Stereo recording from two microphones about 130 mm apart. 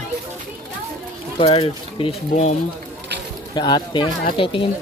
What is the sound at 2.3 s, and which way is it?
Speech, 70° left (ahead or behind).